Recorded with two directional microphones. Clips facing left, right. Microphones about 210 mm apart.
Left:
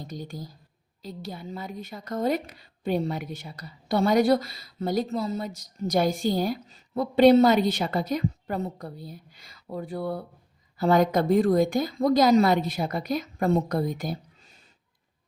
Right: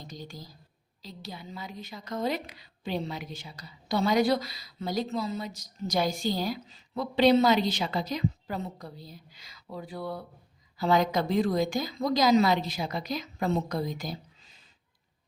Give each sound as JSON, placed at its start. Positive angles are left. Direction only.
{"t": 0.1, "sound": "a woman's voice", "side_deg": 50}